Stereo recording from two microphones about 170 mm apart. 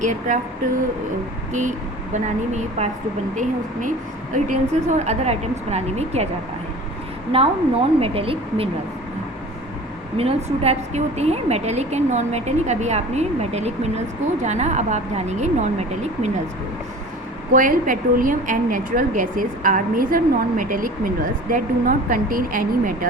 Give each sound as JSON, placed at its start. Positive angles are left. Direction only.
{"t": 0.0, "sound": "a woman's voice", "side_deg": -45}
{"t": 2.1, "sound": "a woman's voice", "side_deg": -45}
{"t": 7.3, "sound": "a woman's voice", "side_deg": -35}
{"t": 10.2, "sound": "a woman's voice", "side_deg": -35}
{"t": 17.5, "sound": "a woman's voice", "side_deg": -55}